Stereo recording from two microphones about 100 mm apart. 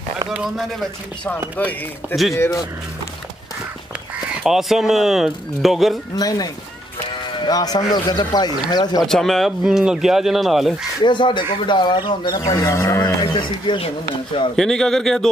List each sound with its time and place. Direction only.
0.3 s speech: 5° right (ahead or behind)
1.6 s speech: 15° left (ahead or behind)
2.3 s speech: 30° left (ahead or behind)
4.4 s speech: 5° right (ahead or behind)
6.1 s speech: 40° left (ahead or behind)
9.0 s speech: 5° left (ahead or behind)
11.0 s speech: 50° left (ahead or behind)
12.4 s speech: 35° left (ahead or behind)
13.0 s speech: 45° left (ahead or behind); by 14.5 s 60° left (ahead or behind)
14.5 s speech: 5° left (ahead or behind)